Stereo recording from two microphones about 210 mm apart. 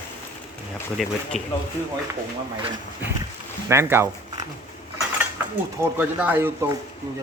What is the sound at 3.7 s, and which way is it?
Speech, 10° right (ahead or behind).